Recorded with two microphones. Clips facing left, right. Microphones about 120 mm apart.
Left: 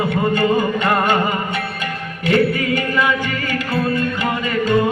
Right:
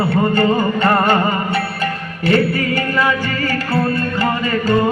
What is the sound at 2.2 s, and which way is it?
Music, 15° left (ahead or behind).